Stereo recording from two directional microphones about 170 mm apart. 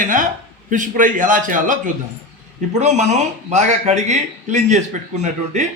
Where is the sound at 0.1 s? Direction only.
50° right (ahead or behind).